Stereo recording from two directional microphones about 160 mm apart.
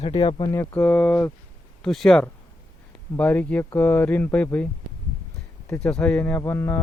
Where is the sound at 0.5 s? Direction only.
15° left (ahead or behind).